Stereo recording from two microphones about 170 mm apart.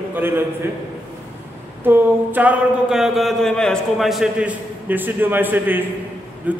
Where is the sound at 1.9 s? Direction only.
10° right (ahead or behind).